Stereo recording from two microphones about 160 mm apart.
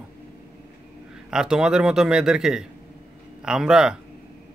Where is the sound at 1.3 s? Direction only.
5° right (ahead or behind).